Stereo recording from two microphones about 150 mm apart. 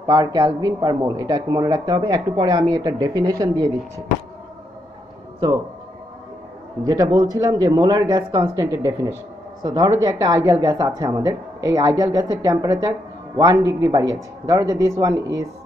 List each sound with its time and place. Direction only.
0.0 s speech: 25° right (ahead or behind)
6.8 s speech: 25° right (ahead or behind)